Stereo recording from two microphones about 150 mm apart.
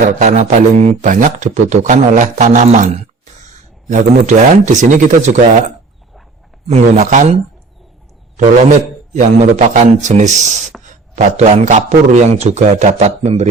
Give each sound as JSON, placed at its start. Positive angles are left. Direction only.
{"t": 0.2, "sound": "speech", "side_deg": -55}
{"t": 6.7, "sound": "a man's voice", "side_deg": -45}
{"t": 9.4, "sound": "a man's voice", "side_deg": -50}